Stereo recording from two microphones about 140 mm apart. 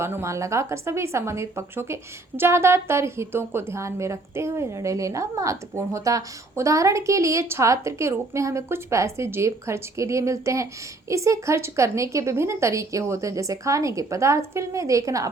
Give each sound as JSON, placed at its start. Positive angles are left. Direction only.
{"t": 0.0, "sound": "a woman's voice", "side_deg": -20}